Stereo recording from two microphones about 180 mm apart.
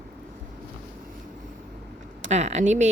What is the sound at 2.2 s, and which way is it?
Speech, 40° right (ahead or behind).